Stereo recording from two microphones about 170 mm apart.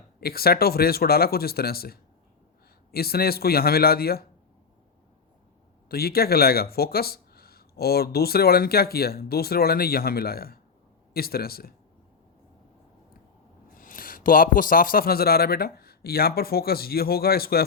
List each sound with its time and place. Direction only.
0.2 s speech: 65° left (ahead or behind)
5.9 s speech: 65° left (ahead or behind)
13.7 s speech: 55° left (ahead or behind)